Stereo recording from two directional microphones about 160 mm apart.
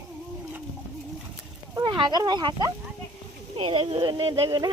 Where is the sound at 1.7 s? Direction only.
25° right (ahead or behind).